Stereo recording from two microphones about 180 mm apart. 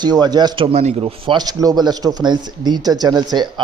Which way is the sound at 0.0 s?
25° right (ahead or behind).